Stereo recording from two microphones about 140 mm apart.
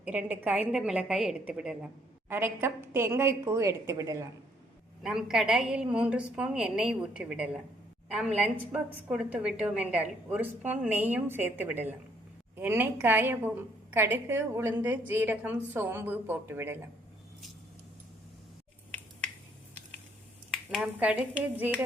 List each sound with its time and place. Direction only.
0.0 s a woman's voice: 10° right (ahead or behind)
2.3 s a woman's voice: 15° right (ahead or behind)
5.0 s a woman's voice: 5° right (ahead or behind)
20.5 s a woman's voice: centre (ahead or behind)